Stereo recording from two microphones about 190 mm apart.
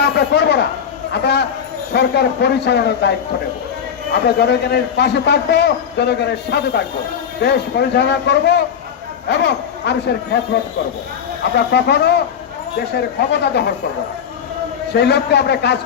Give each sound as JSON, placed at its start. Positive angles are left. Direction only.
{"t": 0.0, "sound": "a sound", "side_deg": 60}
{"t": 1.1, "sound": "a man's voice", "side_deg": 60}
{"t": 11.5, "sound": "a man's voice", "side_deg": 60}
{"t": 14.9, "sound": "a man's voice", "side_deg": 60}